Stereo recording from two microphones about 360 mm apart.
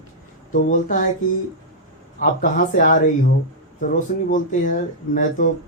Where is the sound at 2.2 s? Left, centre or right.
Left.